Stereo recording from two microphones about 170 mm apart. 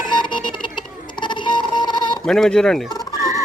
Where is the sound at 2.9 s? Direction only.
20° left (ahead or behind).